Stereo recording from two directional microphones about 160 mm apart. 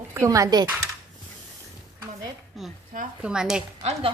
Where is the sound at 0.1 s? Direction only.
20° right (ahead or behind).